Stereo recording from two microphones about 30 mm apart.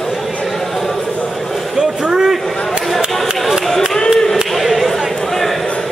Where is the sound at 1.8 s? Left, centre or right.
Centre.